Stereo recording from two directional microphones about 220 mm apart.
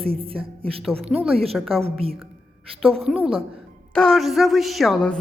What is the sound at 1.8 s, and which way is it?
Speech, 25° right (ahead or behind).